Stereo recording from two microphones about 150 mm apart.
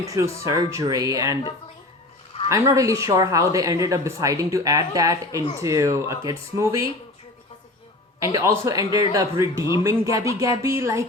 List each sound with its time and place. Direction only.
0.1 s speech: 25° right (ahead or behind)
2.5 s speech: 20° right (ahead or behind)
8.2 s speech: 20° right (ahead or behind)